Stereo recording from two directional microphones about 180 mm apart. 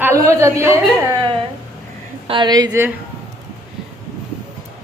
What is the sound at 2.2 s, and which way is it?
Speech, 25° right (ahead or behind).